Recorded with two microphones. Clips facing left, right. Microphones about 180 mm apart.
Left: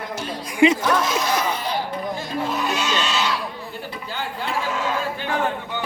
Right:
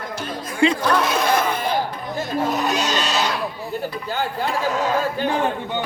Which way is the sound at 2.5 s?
40° right (ahead or behind).